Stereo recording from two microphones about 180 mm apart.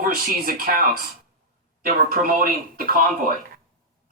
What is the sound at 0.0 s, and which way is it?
Speech, 50° right (ahead or behind).